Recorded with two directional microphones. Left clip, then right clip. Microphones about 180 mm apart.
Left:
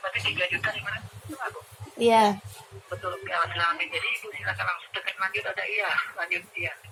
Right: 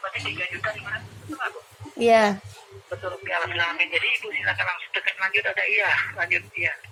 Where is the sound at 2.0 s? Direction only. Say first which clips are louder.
Right 2 dB; 40° right (ahead or behind).